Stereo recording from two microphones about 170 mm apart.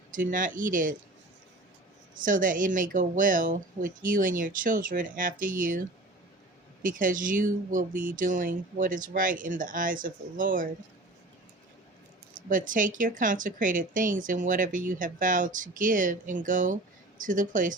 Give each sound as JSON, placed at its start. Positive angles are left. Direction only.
{"t": 0.1, "sound": "speech", "side_deg": -50}
{"t": 2.1, "sound": "speech", "side_deg": -50}
{"t": 6.8, "sound": "speech", "side_deg": -50}
{"t": 12.5, "sound": "speech", "side_deg": -50}